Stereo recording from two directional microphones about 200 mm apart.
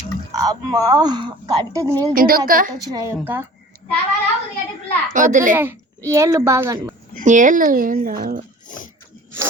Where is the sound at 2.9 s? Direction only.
15° right (ahead or behind).